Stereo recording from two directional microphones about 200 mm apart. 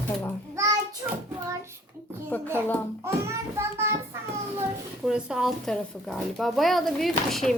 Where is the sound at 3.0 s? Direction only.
15° right (ahead or behind).